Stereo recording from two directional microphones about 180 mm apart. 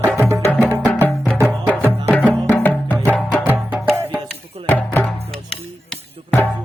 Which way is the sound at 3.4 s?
10° right (ahead or behind).